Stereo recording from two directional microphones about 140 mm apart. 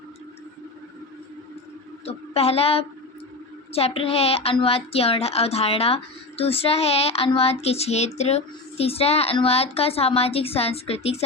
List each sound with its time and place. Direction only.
2.0 s a woman's voice: 45° left (ahead or behind)